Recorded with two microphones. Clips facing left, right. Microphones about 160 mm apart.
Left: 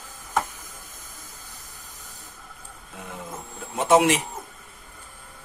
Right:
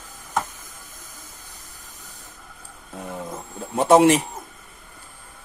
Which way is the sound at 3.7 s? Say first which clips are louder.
Right 4 dB; 35° right (ahead or behind).